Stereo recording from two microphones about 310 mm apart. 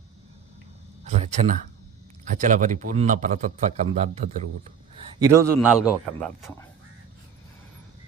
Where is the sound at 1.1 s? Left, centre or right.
Right.